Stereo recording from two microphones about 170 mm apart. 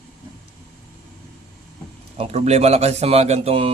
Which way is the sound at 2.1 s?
40° right (ahead or behind).